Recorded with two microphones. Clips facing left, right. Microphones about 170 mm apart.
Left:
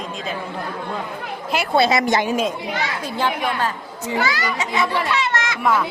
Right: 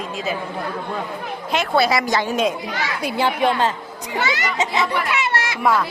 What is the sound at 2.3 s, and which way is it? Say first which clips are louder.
Speech: right 1 dB; 5° left (ahead or behind).